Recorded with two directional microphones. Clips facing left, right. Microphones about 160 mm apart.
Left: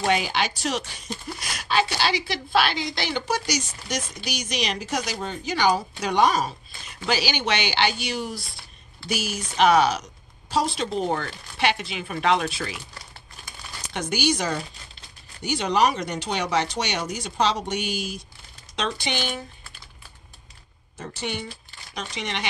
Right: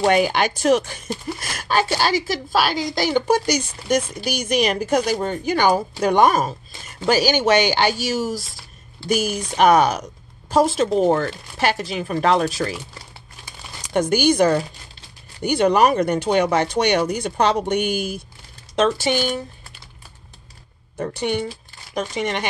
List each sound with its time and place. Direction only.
0.0 s speech: 50° right (ahead or behind)
13.9 s speech: 50° right (ahead or behind)
18.8 s speech: 45° right (ahead or behind)
21.0 s speech: 55° right (ahead or behind)